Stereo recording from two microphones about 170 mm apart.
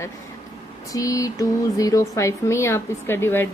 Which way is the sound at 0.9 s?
20° left (ahead or behind).